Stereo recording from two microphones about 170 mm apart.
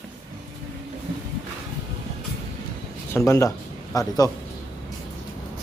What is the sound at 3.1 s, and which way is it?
Speech, 15° left (ahead or behind).